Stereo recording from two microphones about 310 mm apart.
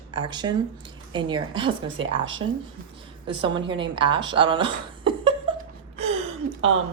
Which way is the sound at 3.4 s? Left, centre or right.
Centre.